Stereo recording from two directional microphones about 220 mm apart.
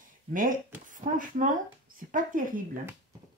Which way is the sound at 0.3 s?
40° right (ahead or behind).